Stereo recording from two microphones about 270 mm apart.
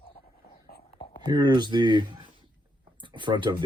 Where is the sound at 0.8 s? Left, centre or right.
Centre.